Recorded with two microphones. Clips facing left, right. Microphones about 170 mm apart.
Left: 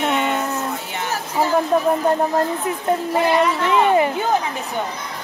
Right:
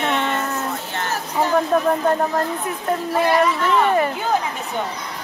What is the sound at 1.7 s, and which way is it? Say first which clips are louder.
Speech: left 1 dB; 15° left (ahead or behind).